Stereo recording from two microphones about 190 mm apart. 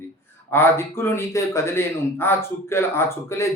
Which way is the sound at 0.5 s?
10° left (ahead or behind).